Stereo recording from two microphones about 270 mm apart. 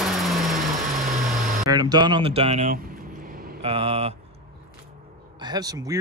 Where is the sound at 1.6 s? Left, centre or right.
Centre.